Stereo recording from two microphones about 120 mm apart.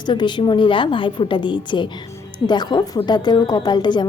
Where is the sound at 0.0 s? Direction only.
40° left (ahead or behind).